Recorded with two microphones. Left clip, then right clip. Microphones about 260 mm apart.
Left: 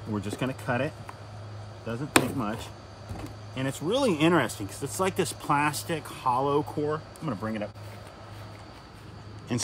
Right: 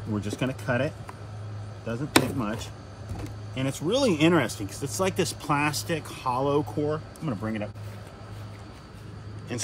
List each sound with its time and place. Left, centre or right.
0.1 s speech: centre
9.5 s speech: left